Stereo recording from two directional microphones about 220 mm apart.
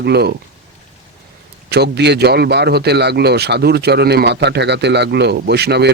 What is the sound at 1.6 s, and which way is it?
A man's voice, 50° right (ahead or behind).